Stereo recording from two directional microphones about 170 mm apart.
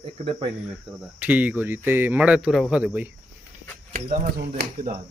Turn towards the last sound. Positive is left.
turn(degrees=-60)  # may be behind; listen again after turning